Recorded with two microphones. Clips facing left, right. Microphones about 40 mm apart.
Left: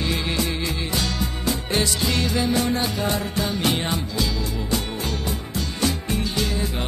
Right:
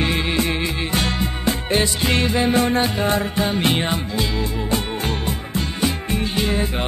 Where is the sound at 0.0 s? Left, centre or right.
Right.